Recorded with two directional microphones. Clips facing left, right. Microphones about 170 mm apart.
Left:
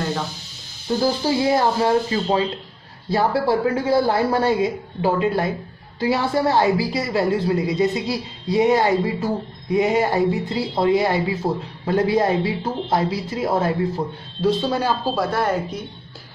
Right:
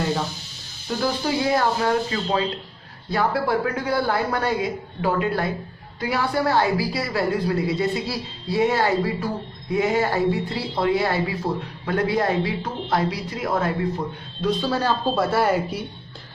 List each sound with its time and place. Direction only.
1.0 s speech: 30° left (ahead or behind)
14.7 s speech: 10° left (ahead or behind)
15.1 s speech: 5° right (ahead or behind)